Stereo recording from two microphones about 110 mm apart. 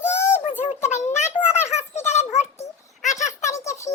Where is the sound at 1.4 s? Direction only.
20° left (ahead or behind).